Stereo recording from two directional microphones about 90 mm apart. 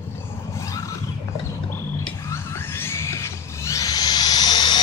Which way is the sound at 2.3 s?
30° left (ahead or behind).